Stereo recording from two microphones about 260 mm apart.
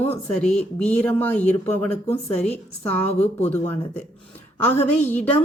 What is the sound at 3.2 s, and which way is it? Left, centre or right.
Speech, left.